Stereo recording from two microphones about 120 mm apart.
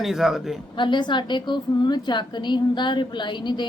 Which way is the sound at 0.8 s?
40° left (ahead or behind).